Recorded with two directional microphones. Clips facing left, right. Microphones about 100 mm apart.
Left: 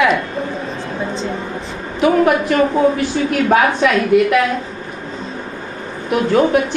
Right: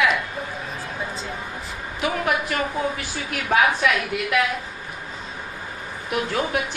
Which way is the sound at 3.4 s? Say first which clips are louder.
Left 4 dB; 45° left (ahead or behind).